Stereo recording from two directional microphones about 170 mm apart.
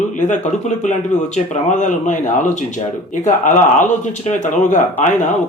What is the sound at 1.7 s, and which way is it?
Speech, 45° left (ahead or behind).